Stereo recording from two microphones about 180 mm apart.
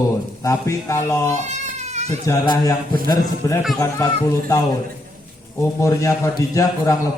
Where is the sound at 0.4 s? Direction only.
15° left (ahead or behind).